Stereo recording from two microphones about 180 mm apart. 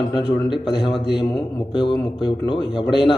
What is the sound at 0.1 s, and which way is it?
A man's voice, 25° left (ahead or behind).